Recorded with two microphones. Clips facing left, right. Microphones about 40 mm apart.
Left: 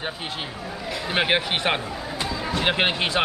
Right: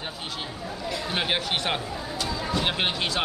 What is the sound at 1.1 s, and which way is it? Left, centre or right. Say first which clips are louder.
Speech: left 6 dB; left.